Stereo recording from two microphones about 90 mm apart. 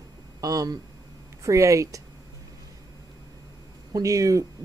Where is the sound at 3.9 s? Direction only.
35° right (ahead or behind).